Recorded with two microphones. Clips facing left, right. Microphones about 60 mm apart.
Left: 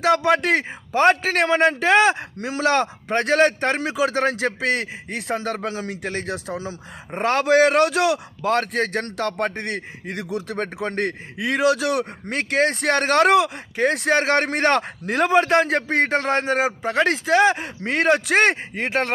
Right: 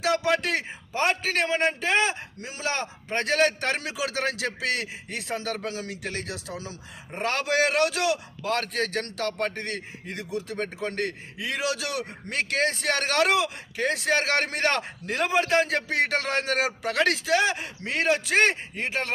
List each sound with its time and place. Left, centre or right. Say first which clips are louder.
0.0 s a man's voice: left 6 dB; left
10.2 s a man's voice: left 3 dB; left
10.8 s a man's voice: left 6 dB; left
17.2 s a man's voice: left 7 dB; left